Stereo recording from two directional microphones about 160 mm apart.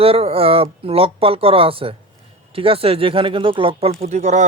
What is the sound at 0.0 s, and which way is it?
Speech, 35° right (ahead or behind).